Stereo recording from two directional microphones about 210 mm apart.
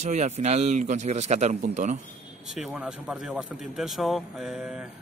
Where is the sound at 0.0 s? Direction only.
30° right (ahead or behind).